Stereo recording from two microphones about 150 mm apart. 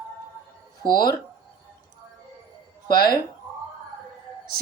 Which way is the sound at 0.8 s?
30° left (ahead or behind).